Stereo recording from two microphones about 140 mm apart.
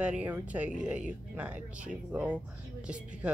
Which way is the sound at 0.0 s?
10° right (ahead or behind).